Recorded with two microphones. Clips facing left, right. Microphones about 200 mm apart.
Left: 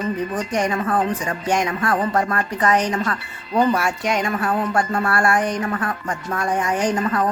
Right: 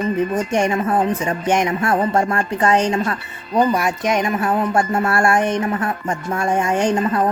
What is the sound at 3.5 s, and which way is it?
Speech, 15° right (ahead or behind).